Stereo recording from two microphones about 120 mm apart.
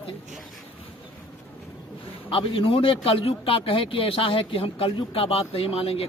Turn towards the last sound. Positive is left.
turn(degrees=55)  # may be behind; listen again after turning